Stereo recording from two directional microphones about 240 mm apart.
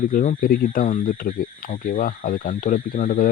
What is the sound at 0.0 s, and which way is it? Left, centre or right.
Speech, left.